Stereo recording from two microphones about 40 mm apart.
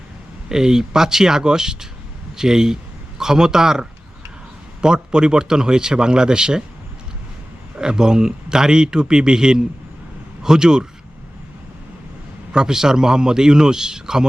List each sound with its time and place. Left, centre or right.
0.4 s a man's voice: centre
7.8 s a man's voice: centre
12.5 s a man's voice: centre